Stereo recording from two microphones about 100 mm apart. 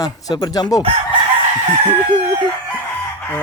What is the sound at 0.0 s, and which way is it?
Speech, 40° left (ahead or behind).